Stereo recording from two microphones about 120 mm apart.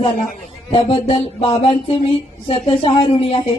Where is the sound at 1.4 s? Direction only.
55° left (ahead or behind).